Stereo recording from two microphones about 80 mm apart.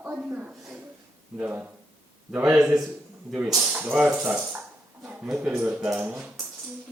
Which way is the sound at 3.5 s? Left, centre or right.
Centre.